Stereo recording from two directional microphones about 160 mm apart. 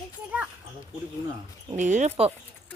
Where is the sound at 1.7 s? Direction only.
50° right (ahead or behind).